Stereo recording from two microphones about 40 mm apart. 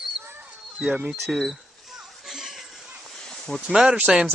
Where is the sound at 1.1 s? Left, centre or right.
Centre.